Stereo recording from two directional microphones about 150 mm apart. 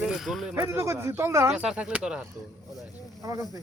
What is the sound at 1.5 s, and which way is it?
Speech, 5° right (ahead or behind).